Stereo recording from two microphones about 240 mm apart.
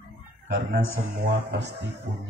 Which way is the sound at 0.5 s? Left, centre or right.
Right.